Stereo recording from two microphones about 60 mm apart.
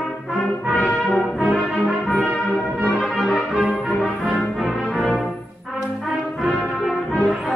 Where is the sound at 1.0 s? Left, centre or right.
Centre.